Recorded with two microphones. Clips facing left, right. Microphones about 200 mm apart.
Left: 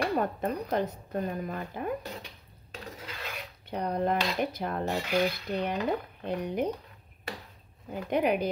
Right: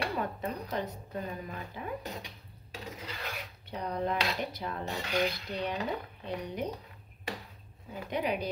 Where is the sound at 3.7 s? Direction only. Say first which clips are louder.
Left 4 dB; 55° left (ahead or behind).